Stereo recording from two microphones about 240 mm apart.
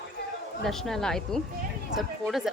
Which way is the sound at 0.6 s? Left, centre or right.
Centre.